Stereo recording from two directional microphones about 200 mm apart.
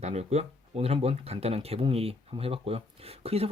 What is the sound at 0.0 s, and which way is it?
Speech, 35° right (ahead or behind).